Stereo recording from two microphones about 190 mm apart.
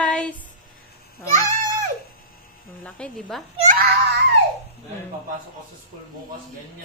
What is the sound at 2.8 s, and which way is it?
Speech, 5° left (ahead or behind).